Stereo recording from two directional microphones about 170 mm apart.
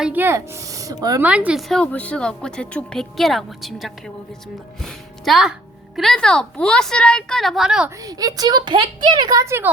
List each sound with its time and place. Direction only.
0.0 s speech: 10° right (ahead or behind)
1.2 s a woman's voice: 10° right (ahead or behind)
8.0 s a woman's voice: 20° right (ahead or behind)